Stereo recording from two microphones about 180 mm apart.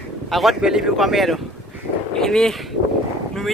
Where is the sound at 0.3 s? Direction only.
Centre (ahead or behind).